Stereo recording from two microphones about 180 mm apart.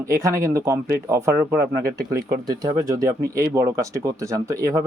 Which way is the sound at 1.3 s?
55° right (ahead or behind).